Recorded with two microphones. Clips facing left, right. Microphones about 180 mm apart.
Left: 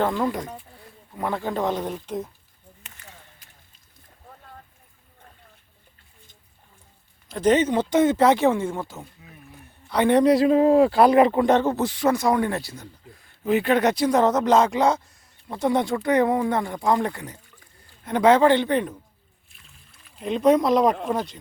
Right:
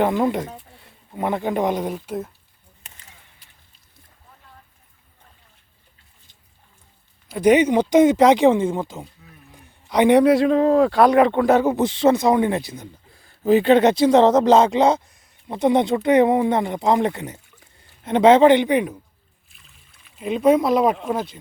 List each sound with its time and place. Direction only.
0.0 s speech: 20° right (ahead or behind)
7.3 s speech: 10° right (ahead or behind)
10.2 s speech: centre (ahead or behind)
11.8 s speech: 25° right (ahead or behind)
13.4 s speech: 30° right (ahead or behind); by 18.9 s 15° right (ahead or behind)
19.5 s boat: centre (ahead or behind)